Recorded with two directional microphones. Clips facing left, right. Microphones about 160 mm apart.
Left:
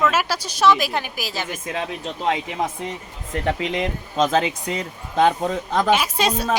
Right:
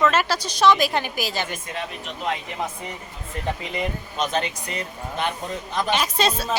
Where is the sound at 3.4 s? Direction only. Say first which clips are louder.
Left 4 dB; 90° left.